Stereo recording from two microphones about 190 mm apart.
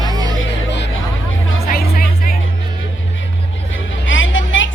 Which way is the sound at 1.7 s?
50° left (ahead or behind).